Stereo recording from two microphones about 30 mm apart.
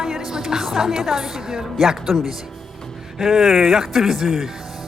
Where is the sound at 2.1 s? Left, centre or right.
Centre.